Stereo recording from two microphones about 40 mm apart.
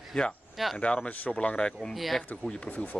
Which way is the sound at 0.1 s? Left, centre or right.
Left.